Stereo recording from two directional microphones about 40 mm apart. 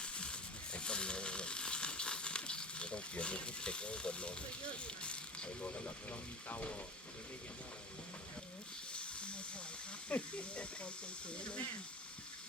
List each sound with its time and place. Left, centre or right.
0.0 s a sound: left
6.1 s speech: left
8.9 s snake: left
10.1 s speech: left